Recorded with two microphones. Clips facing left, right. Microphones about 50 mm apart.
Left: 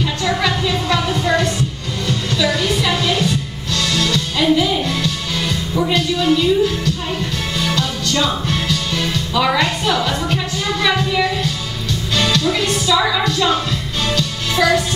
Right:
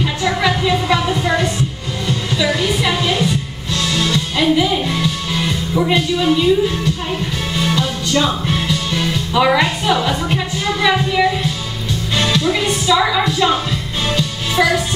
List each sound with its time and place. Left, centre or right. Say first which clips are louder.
0.0 s music: right 1 dB; centre